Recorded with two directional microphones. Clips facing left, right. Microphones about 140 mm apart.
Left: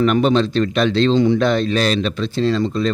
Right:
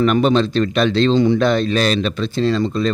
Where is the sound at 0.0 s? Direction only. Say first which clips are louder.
Even; 45° right (ahead or behind).